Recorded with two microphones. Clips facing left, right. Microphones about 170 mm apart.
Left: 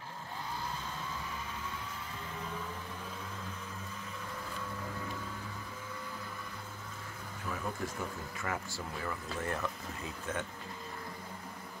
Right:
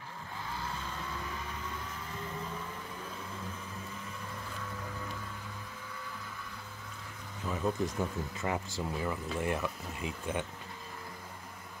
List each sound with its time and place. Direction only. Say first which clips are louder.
7.4 s vehicle: right 6 dB; 20° right (ahead or behind)
8.4 s speech: right 4 dB; 20° right (ahead or behind)